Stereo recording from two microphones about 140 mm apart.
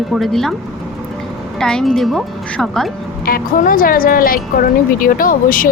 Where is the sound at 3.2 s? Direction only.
90° left.